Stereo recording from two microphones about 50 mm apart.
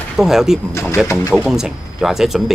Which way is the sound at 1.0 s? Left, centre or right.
Left.